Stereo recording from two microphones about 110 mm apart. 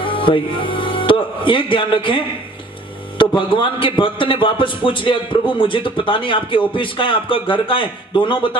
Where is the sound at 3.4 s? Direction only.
50° left (ahead or behind).